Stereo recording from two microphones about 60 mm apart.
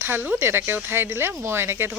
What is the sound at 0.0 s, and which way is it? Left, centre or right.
Speech, right.